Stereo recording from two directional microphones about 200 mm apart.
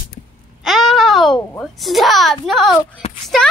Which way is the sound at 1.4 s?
5° left (ahead or behind).